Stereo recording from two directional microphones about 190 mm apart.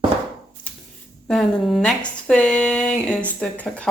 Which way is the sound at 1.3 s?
Centre (ahead or behind).